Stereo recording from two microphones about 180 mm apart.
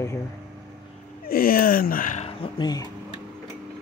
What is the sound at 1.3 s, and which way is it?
Speech, 55° left (ahead or behind).